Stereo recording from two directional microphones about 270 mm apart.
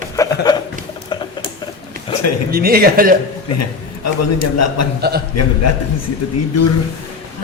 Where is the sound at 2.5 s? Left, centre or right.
Right.